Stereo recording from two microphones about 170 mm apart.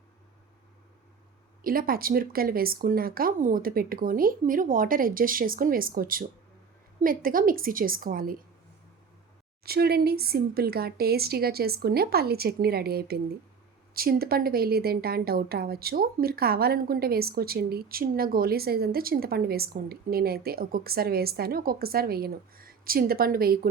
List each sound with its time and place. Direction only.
1.6 s a woman's voice: 60° right (ahead or behind)
9.6 s a woman's voice: 65° right (ahead or behind)